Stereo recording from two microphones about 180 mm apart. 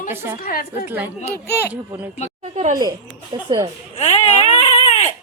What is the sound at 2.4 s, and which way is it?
Speech, 40° right (ahead or behind).